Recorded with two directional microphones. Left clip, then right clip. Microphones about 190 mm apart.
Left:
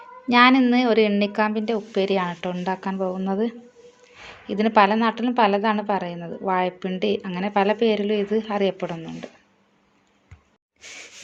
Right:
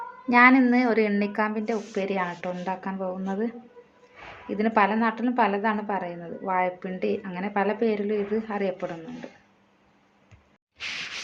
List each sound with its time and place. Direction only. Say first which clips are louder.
0.3 s a woman's voice: left 2 dB; 30° left (ahead or behind)